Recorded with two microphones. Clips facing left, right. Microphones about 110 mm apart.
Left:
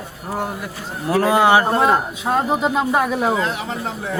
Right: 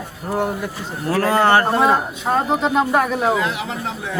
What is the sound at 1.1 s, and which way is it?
Speech, 15° left (ahead or behind).